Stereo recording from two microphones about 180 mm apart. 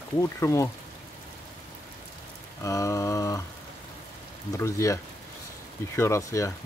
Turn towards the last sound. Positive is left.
turn(degrees=15)  # may be behind; listen again after turning